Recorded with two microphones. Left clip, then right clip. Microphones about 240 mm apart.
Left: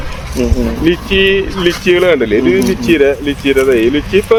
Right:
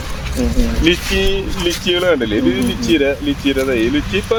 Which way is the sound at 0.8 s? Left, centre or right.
Left.